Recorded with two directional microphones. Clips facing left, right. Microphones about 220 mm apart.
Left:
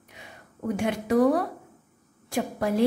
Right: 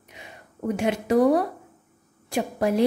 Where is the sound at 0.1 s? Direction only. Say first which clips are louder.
Right 3 dB; 20° right (ahead or behind).